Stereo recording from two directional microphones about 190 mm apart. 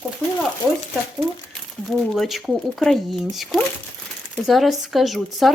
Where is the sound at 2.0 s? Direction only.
Centre (ahead or behind).